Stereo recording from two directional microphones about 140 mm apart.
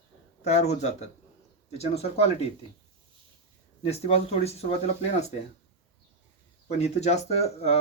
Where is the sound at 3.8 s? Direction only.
45° left (ahead or behind).